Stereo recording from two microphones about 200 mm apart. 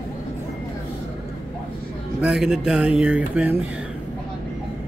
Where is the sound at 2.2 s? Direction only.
5° right (ahead or behind).